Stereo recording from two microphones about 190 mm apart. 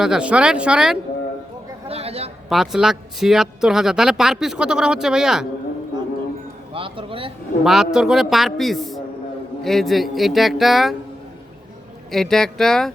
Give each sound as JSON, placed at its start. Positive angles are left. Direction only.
{"t": 0.0, "sound": "speech", "side_deg": -5}
{"t": 1.9, "sound": "a sound", "side_deg": -30}
{"t": 2.5, "sound": "speech", "side_deg": 0}
{"t": 6.7, "sound": "speech", "side_deg": -30}
{"t": 7.6, "sound": "speech", "side_deg": 0}
{"t": 12.1, "sound": "speech", "side_deg": 0}